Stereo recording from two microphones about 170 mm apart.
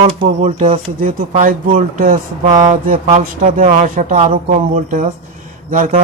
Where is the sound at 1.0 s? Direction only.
50° right (ahead or behind).